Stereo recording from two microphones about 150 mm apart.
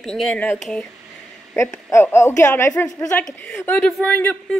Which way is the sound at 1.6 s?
20° left (ahead or behind).